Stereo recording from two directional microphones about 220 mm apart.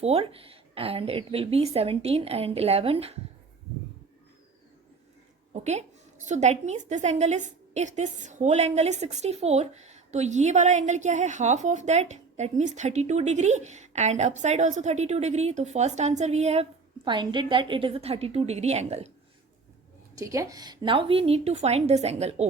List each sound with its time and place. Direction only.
0.0 s speech: 25° right (ahead or behind)
6.2 s a woman's voice: 30° right (ahead or behind)
20.1 s speech: 15° right (ahead or behind); by 22.4 s 30° right (ahead or behind)